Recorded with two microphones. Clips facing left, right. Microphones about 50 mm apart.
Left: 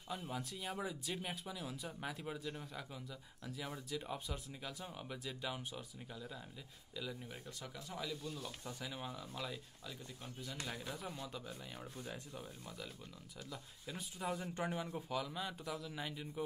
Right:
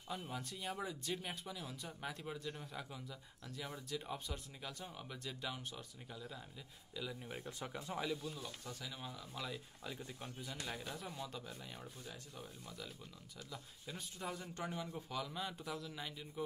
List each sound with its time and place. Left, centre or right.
0.1 s speech: centre
7.2 s speech: right
8.2 s speech: centre
8.6 s speech: centre
9.3 s speech: centre
9.8 s speech: centre
14.5 s speech: centre
15.0 s speech: centre